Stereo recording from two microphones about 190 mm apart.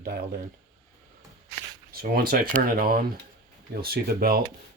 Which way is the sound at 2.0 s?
50° right (ahead or behind).